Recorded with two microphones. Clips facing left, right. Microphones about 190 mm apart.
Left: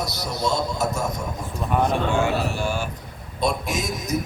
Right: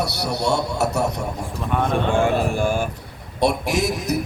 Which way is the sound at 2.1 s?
50° right (ahead or behind).